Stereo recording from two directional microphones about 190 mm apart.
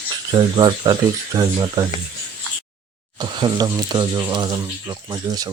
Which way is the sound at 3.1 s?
25° right (ahead or behind).